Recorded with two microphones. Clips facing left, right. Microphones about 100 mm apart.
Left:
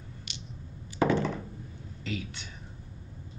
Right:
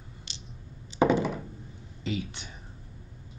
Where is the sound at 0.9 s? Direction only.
15° right (ahead or behind).